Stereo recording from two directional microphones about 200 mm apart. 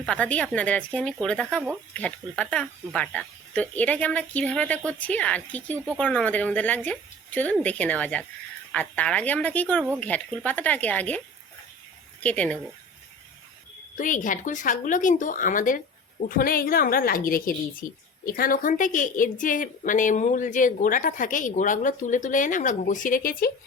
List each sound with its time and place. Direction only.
0.0 s speech: 5° left (ahead or behind)
12.2 s speech: 5° left (ahead or behind)
13.9 s a woman's voice: 40° left (ahead or behind)